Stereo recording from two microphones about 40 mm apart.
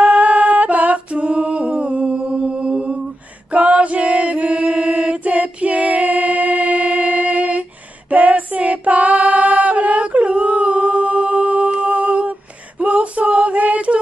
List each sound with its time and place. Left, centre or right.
0.0 s a capella: right
3.5 s chant: right
8.1 s female singing: right